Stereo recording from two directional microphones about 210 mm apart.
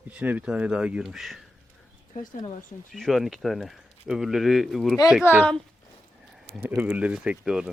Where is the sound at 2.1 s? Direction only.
35° left (ahead or behind).